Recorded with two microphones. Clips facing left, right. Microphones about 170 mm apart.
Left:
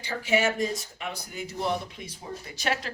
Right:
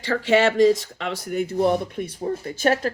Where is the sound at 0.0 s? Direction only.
90° right.